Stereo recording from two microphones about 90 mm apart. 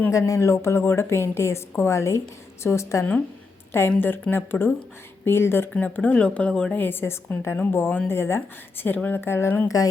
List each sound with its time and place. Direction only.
0.1 s a woman's voice: 35° left (ahead or behind)
5.7 s speech: 15° left (ahead or behind)
6.7 s a woman's voice: 25° left (ahead or behind)